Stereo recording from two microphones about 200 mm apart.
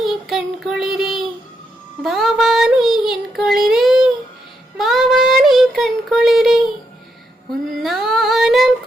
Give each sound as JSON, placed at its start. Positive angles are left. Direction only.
{"t": 0.0, "sound": "child singing", "side_deg": 0}
{"t": 7.8, "sound": "female singing", "side_deg": 0}